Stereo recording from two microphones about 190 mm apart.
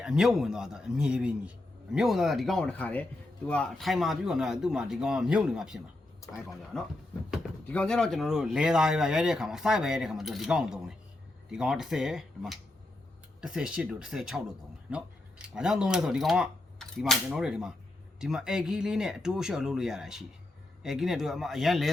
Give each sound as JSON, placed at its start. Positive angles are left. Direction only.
{"t": 0.0, "sound": "a man's voice", "side_deg": -5}
{"t": 6.2, "sound": "speech", "side_deg": 15}
{"t": 6.7, "sound": "a man's voice", "side_deg": 5}